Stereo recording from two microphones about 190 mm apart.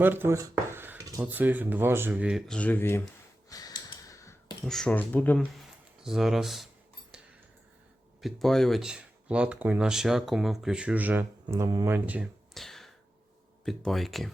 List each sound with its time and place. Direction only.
0.0 s a sound: 10° right (ahead or behind)
1.2 s speech: 10° right (ahead or behind)
2.5 s speech: 5° left (ahead or behind)
3.5 s a sound: 20° left (ahead or behind)
4.6 s speech: centre (ahead or behind)
6.0 s speech: centre (ahead or behind)
8.2 s speech: centre (ahead or behind)